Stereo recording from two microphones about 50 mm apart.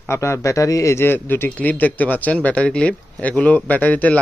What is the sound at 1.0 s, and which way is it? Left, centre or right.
Speech, left.